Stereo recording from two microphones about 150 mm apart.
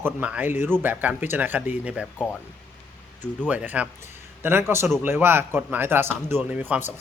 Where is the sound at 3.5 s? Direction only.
10° right (ahead or behind).